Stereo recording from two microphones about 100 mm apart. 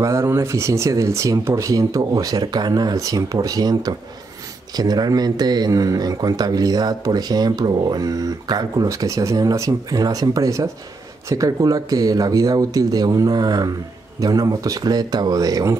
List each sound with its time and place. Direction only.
0.0 s speech: 30° right (ahead or behind)